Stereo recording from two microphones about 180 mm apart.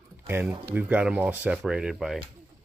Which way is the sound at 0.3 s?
10° right (ahead or behind).